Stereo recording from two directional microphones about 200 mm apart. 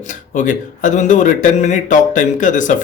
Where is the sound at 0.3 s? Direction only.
40° left (ahead or behind).